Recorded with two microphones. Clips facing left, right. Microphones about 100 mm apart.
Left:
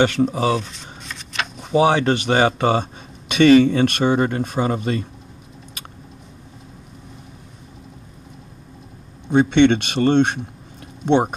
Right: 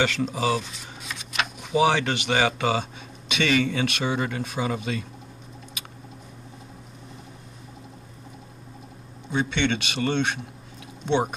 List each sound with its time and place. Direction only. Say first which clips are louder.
0.0 s speech: left 7 dB; 45° left (ahead or behind)
0.6 s shuffling cards: left 4 dB; 5° right (ahead or behind)
1.6 s speech: left 5 dB; 40° left (ahead or behind)
9.3 s speech: left 11 dB; 55° left (ahead or behind)